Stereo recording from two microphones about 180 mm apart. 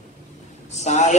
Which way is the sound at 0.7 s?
40° left (ahead or behind).